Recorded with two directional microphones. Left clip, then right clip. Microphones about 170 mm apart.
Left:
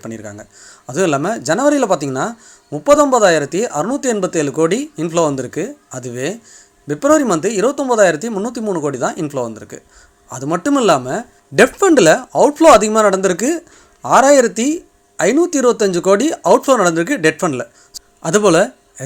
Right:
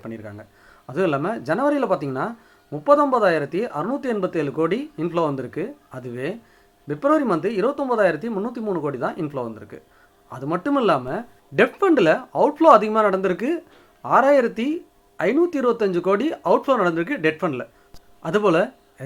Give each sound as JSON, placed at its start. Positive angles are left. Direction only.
{"t": 0.0, "sound": "speech", "side_deg": 35}